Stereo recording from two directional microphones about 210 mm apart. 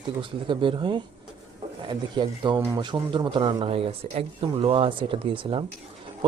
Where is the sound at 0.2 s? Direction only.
25° right (ahead or behind).